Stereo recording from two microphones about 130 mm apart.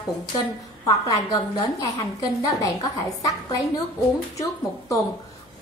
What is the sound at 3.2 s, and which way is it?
A woman's voice, 25° left (ahead or behind).